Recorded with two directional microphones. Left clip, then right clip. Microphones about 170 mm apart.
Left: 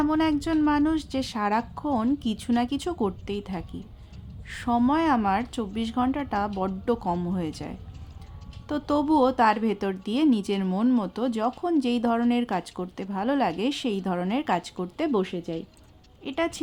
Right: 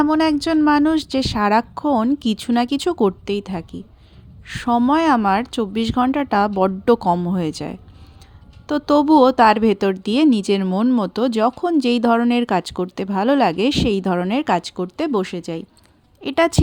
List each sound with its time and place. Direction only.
0.0 s speech: 35° right (ahead or behind)
16.2 s a woman's voice: 55° right (ahead or behind)